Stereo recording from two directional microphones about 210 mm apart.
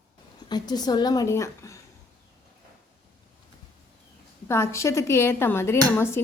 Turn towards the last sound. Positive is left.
turn(degrees=10)  # may be behind; listen again after turning